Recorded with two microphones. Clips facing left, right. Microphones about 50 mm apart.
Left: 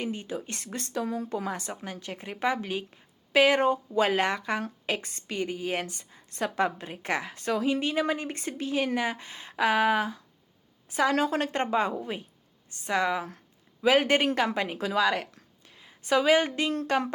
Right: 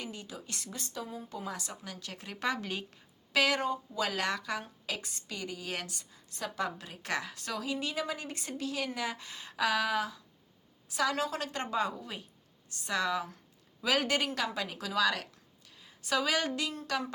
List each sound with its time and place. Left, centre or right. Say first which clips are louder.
0.0 s a woman's voice: left 9 dB; left
1.0 s speech: left 10 dB; left
1.5 s a woman's voice: left 6 dB; left; by 3.0 s centre
3.3 s a woman's voice: left 7 dB; left
3.6 s a woman's voice: left 8 dB; left